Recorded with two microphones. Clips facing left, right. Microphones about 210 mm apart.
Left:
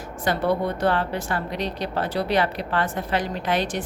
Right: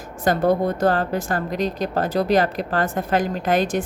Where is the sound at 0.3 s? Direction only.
45° right (ahead or behind).